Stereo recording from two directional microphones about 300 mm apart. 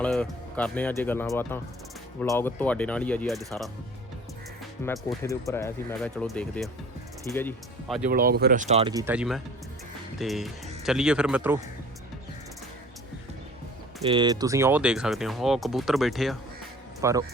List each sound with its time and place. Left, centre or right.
0.0 s speech: centre
4.8 s speech: centre
8.1 s speech: right; by 11.6 s centre
14.1 s speech: centre